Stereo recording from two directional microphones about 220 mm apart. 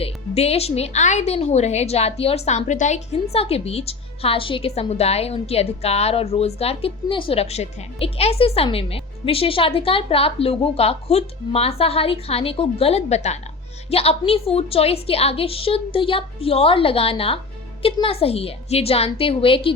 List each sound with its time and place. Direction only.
0.0 s speech: 30° left (ahead or behind)